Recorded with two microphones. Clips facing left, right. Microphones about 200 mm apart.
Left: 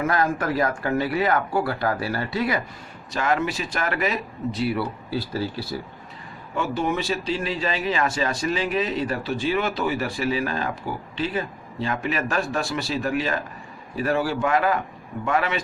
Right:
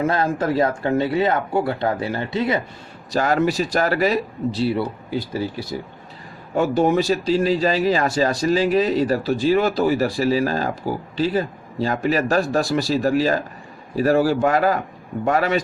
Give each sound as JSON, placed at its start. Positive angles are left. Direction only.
{"t": 0.0, "sound": "speech", "side_deg": -25}
{"t": 3.1, "sound": "speech", "side_deg": -35}
{"t": 6.5, "sound": "speech", "side_deg": -40}